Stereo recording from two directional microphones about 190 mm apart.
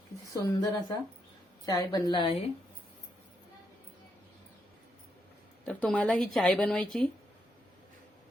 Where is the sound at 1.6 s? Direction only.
20° left (ahead or behind).